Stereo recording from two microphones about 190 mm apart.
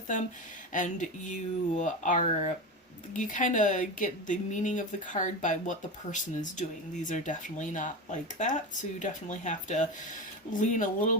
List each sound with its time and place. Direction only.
0.7 s speech: 40° left (ahead or behind)